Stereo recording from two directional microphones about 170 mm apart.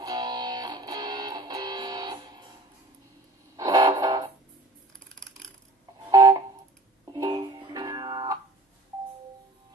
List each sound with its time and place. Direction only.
0.0 s music: 25° right (ahead or behind)
3.5 s music: 25° right (ahead or behind)
6.0 s a sound: 25° right (ahead or behind)
7.1 s music: 25° right (ahead or behind)